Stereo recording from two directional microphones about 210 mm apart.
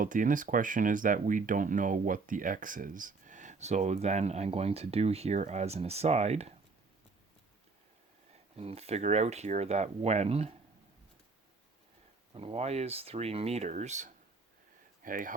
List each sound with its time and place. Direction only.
0.0 s speech: 40° right (ahead or behind)
8.5 s speech: 30° right (ahead or behind)
12.3 s speech: 25° right (ahead or behind)